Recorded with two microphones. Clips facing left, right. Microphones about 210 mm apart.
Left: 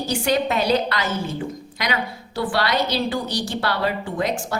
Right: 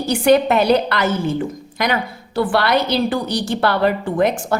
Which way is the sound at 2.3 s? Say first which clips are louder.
Right 5 dB; 55° right (ahead or behind).